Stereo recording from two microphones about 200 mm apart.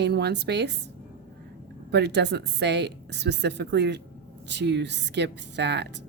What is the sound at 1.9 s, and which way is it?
A woman's voice, 55° right (ahead or behind).